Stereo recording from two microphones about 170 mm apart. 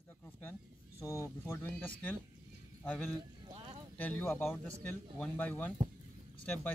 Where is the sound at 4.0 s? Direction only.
10° left (ahead or behind).